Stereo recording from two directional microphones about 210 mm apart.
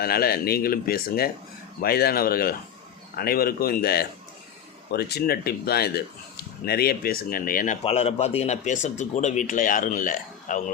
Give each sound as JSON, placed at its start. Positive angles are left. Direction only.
{"t": 0.0, "sound": "speech", "side_deg": 45}